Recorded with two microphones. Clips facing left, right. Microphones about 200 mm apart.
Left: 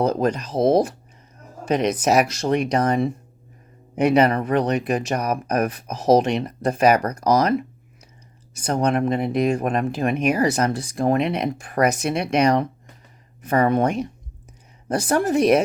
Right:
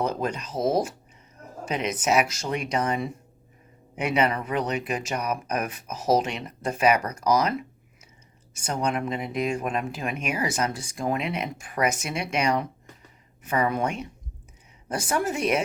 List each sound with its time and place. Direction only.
0.0 s speech: 35° left (ahead or behind)
1.7 s speech: 35° left (ahead or behind)
8.5 s speech: 35° left (ahead or behind)
13.6 s speech: 55° left (ahead or behind)
14.9 s speech: 35° left (ahead or behind)